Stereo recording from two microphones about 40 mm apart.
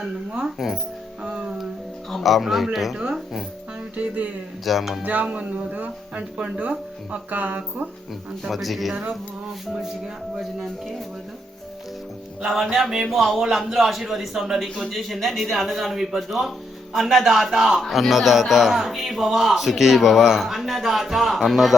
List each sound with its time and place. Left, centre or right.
0.4 s speech: centre
1.2 s music: right
2.0 s speech: centre
3.9 s speech: right
4.6 s speech: centre
5.2 s speech: right
8.4 s speech: centre
12.5 s speech: centre
12.8 s speech: centre
14.8 s speech: centre
17.7 s speech: centre